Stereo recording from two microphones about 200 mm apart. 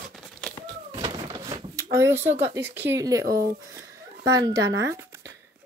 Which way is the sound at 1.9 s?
10° right (ahead or behind).